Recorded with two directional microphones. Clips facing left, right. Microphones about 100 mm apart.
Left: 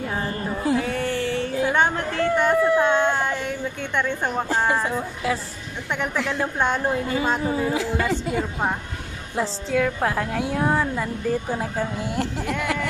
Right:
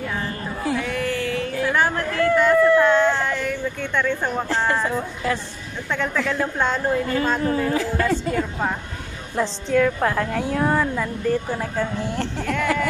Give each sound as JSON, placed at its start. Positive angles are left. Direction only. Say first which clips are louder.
{"t": 0.1, "sound": "a sound", "louder": "left 1 dB", "side_deg": 30}
{"t": 4.9, "sound": "a woman's voice", "louder": "right 1 dB", "side_deg": 5}
{"t": 5.9, "sound": "a woman's voice", "louder": "right 2 dB", "side_deg": 15}
{"t": 7.7, "sound": "a woman's voice", "louder": "right 2 dB", "side_deg": 5}